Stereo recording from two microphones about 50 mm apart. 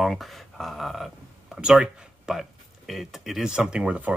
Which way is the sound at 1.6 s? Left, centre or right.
Centre.